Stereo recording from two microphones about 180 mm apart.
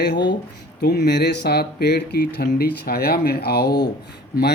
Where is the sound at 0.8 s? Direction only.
65° left (ahead or behind).